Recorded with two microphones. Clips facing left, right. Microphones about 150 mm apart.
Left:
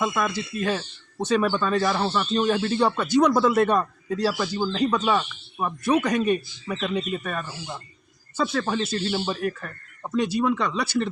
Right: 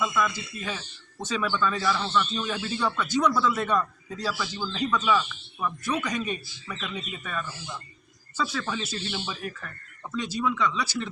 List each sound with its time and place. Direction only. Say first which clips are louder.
0.0 s speech: left 2 dB; 45° left (ahead or behind)
1.5 s speech: left 4 dB; 40° left (ahead or behind)
2.3 s speech: left 8 dB; 60° left (ahead or behind)
2.8 s speech: left 4 dB; 35° left (ahead or behind)
3.4 s speech: left 5 dB; 60° left (ahead or behind)
5.8 s speech: left 10 dB; 60° left (ahead or behind)
9.0 s speech: left 8 dB; 45° left (ahead or behind)
10.2 s speech: left 5 dB; 60° left (ahead or behind)